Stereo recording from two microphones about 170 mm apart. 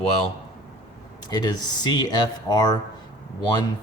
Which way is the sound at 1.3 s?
25° left (ahead or behind).